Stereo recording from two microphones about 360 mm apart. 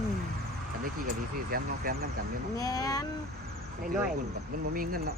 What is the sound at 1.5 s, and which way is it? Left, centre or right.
Speech, right.